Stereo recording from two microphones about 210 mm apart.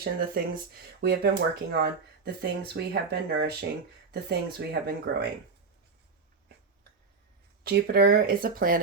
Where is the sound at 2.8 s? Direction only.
55° right (ahead or behind).